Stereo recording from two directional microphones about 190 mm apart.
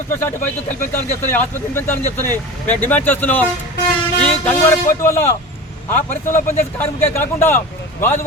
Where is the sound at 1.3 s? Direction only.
10° left (ahead or behind).